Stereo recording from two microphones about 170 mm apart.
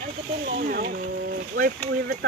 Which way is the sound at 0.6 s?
60° right (ahead or behind).